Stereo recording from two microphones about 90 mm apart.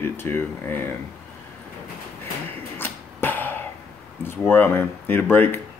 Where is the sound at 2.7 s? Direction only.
25° left (ahead or behind).